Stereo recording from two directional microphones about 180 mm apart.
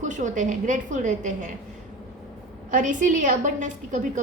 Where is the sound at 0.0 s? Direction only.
45° right (ahead or behind).